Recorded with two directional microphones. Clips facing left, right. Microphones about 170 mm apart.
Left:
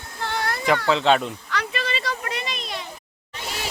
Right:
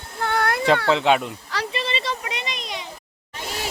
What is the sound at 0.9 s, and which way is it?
Speech, 15° right (ahead or behind).